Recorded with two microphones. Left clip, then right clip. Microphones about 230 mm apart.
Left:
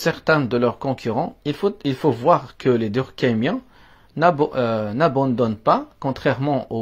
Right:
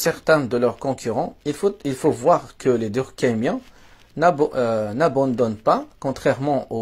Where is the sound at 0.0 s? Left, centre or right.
Left.